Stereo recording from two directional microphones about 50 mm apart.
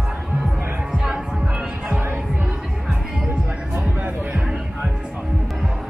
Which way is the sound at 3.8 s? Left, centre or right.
Right.